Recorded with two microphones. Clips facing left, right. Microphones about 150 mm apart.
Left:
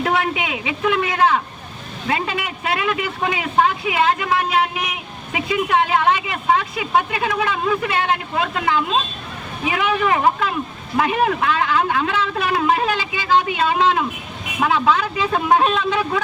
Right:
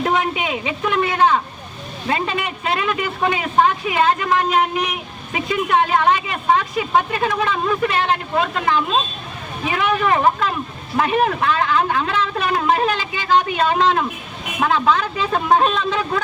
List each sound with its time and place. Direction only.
0.0 s a sound: 20° right (ahead or behind)
0.4 s a woman's voice: 15° left (ahead or behind)
2.1 s a woman's voice: 10° left (ahead or behind)